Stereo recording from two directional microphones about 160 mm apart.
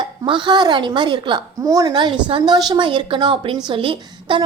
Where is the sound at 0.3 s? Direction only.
30° right (ahead or behind).